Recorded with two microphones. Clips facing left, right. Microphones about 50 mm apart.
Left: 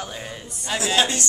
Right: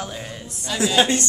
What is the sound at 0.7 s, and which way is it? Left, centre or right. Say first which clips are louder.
Speech: right 2 dB; left.